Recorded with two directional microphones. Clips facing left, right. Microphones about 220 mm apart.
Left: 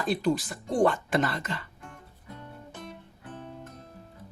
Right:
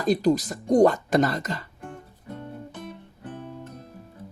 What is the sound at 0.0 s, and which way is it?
Speech, 40° right (ahead or behind).